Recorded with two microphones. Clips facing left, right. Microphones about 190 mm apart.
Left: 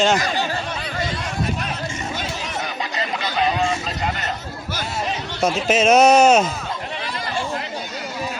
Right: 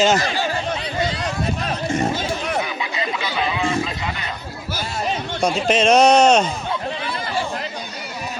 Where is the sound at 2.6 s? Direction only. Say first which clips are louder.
Right 2 dB; 45° left (ahead or behind).